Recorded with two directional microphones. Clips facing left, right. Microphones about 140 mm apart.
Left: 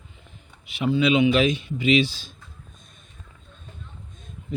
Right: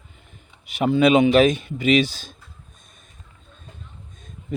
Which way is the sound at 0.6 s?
45° right (ahead or behind).